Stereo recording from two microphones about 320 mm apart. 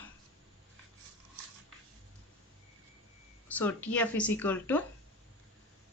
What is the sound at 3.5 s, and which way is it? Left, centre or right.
Speech, centre.